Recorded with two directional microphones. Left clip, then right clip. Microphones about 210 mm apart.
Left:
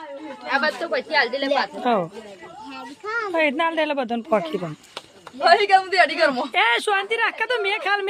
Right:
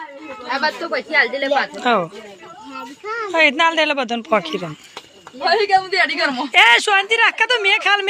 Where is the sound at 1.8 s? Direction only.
5° left (ahead or behind).